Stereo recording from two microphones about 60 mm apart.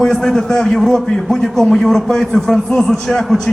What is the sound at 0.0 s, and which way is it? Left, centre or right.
A man's voice, centre.